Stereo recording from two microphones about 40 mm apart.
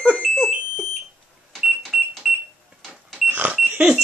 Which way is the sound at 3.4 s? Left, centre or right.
Right.